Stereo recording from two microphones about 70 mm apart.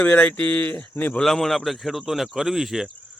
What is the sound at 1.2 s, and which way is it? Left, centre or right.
Speech, centre.